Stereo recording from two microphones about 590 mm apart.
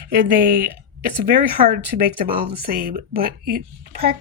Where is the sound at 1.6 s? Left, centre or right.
Centre.